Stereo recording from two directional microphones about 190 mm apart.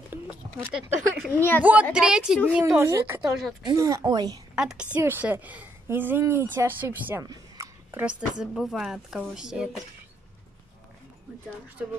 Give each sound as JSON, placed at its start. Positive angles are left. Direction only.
{"t": 0.1, "sound": "a sound", "side_deg": -10}
{"t": 1.6, "sound": "a woman's voice", "side_deg": -10}
{"t": 3.2, "sound": "a woman's voice", "side_deg": 0}
{"t": 3.6, "sound": "speech", "side_deg": -15}
{"t": 4.6, "sound": "a woman's voice", "side_deg": -5}
{"t": 11.8, "sound": "a woman's voice", "side_deg": -5}